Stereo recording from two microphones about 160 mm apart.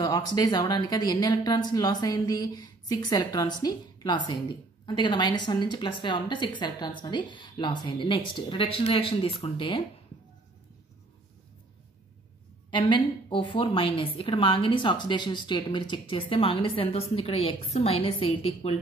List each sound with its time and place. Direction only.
0.0 s a woman's voice: 25° left (ahead or behind)
12.7 s a woman's voice: 30° left (ahead or behind)